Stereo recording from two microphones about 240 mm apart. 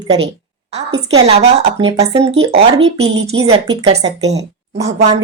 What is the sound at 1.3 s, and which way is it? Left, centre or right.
Speech, right.